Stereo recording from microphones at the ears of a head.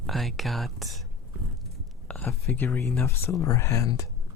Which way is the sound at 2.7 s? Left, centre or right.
Left.